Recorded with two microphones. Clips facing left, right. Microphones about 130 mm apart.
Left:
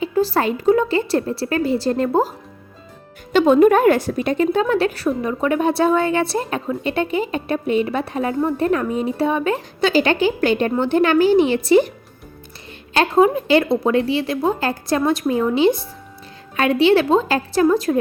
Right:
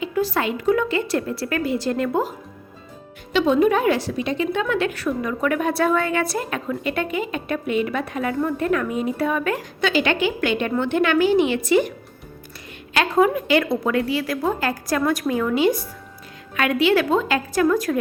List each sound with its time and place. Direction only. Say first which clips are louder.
0.0 s a woman's voice: left 4 dB; 30° left (ahead or behind)
3.3 s a woman's voice: left 5 dB; 50° left (ahead or behind)
4.6 s a woman's voice: left 4 dB; 35° left (ahead or behind)